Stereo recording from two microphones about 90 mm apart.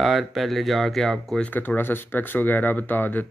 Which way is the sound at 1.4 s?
20° left (ahead or behind).